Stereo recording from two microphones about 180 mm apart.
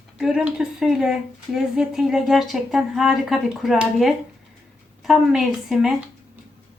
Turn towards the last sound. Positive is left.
turn(degrees=0)  # may be behind; listen again after turning